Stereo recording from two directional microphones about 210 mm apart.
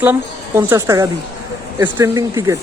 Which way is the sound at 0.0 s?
10° right (ahead or behind).